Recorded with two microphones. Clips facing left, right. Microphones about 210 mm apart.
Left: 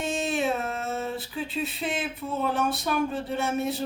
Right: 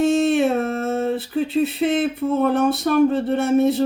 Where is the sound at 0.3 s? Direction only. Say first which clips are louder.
Right 8 dB; 60° right (ahead or behind).